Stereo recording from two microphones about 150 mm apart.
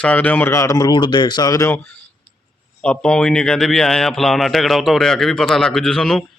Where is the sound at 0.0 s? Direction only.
10° left (ahead or behind).